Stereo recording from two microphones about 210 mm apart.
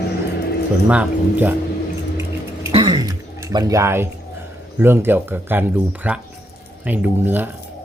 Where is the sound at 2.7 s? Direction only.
20° right (ahead or behind).